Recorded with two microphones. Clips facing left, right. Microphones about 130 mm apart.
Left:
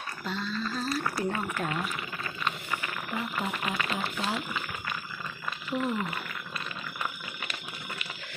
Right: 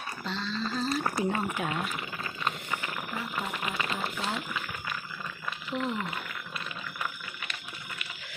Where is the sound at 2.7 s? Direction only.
15° right (ahead or behind).